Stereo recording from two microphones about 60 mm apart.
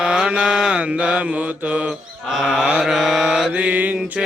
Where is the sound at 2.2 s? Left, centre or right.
Centre.